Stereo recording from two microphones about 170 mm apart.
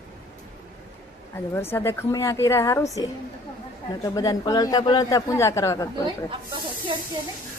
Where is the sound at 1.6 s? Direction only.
15° left (ahead or behind).